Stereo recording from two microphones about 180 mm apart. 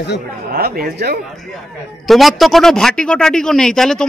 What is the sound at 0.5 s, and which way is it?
Speech, 60° right (ahead or behind).